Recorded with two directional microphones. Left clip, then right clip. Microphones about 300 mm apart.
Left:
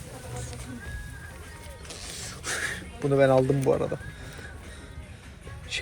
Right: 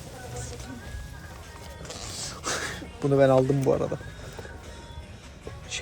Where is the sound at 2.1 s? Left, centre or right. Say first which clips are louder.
Right 2 dB; centre.